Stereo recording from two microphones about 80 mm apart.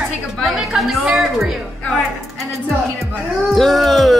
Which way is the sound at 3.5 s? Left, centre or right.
Centre.